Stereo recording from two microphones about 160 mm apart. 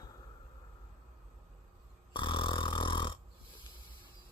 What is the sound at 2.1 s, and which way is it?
Dog, 30° left (ahead or behind).